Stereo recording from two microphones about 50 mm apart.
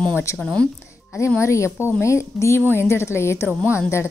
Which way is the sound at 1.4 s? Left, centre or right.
Left.